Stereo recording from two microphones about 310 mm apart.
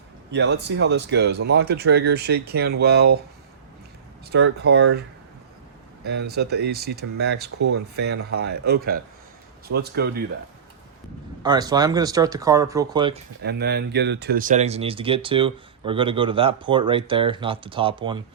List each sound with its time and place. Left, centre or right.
0.3 s speech: right
4.3 s speech: right
6.1 s speech: right
11.4 s speech: centre
13.4 s speech: right; by 18.2 s centre